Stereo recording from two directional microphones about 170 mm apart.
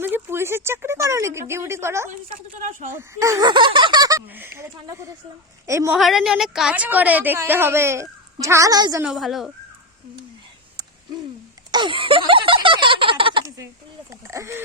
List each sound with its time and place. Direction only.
0.0 s speech: 15° right (ahead or behind)
2.6 s speech: 45° right (ahead or behind)
2.9 s speech: 15° right (ahead or behind)
4.3 s a woman's voice: 10° right (ahead or behind)
6.0 s a woman's voice: centre (ahead or behind); by 9.0 s 20° right (ahead or behind)
9.0 s speech: centre (ahead or behind)
11.7 s a sound: 30° right (ahead or behind)
14.1 s a woman's voice: 15° right (ahead or behind)